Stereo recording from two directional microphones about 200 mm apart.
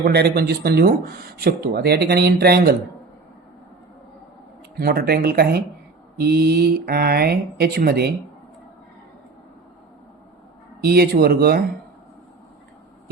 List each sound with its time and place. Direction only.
0.0 s speech: 50° right (ahead or behind)
4.8 s speech: 50° right (ahead or behind)
10.8 s speech: 50° right (ahead or behind)